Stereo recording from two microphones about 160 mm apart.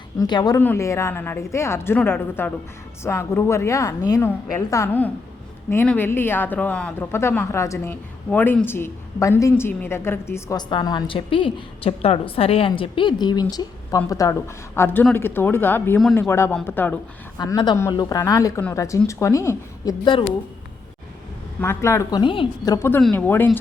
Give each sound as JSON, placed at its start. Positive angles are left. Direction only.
{"t": 0.2, "sound": "a woman's voice", "side_deg": 25}
{"t": 0.6, "sound": "speech", "side_deg": 15}
{"t": 10.6, "sound": "a woman's voice", "side_deg": 25}
{"t": 17.3, "sound": "a woman's voice", "side_deg": 25}
{"t": 21.6, "sound": "speech", "side_deg": 15}
{"t": 22.2, "sound": "a woman's voice", "side_deg": 30}
{"t": 22.9, "sound": "speech", "side_deg": 5}